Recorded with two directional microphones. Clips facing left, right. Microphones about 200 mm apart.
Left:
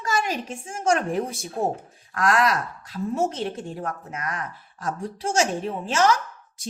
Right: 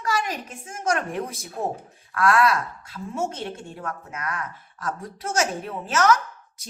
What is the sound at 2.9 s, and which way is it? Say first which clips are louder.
A woman's voice: left 5 dB; 35° left (ahead or behind).